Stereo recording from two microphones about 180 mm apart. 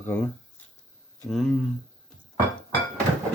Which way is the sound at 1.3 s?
Centre (ahead or behind).